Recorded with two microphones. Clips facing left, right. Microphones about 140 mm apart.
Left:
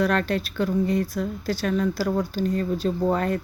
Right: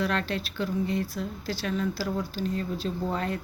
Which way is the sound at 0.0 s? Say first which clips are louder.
Left 6 dB; 50° left (ahead or behind).